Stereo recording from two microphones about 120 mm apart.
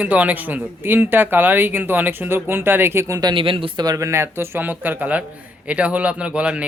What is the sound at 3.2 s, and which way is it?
Speech, 40° right (ahead or behind).